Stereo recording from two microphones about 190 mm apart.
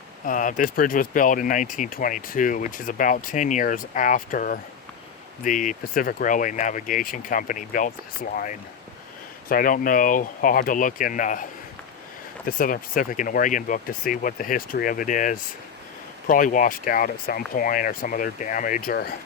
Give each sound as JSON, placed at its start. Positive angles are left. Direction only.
{"t": 0.3, "sound": "speech", "side_deg": 45}
{"t": 9.5, "sound": "speech", "side_deg": 45}
{"t": 12.5, "sound": "speech", "side_deg": 45}